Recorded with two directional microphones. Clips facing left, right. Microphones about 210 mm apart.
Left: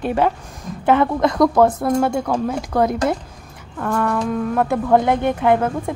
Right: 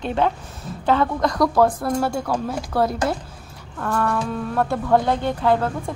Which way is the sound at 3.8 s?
5° left (ahead or behind).